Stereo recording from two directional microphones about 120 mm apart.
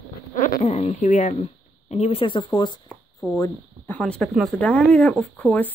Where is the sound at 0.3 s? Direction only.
75° left (ahead or behind).